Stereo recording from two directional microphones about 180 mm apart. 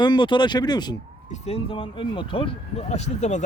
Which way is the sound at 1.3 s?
35° left (ahead or behind).